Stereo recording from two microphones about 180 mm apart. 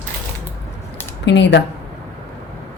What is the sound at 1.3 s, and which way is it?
Speech, 75° left (ahead or behind).